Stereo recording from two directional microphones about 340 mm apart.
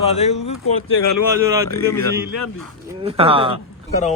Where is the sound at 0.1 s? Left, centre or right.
Centre.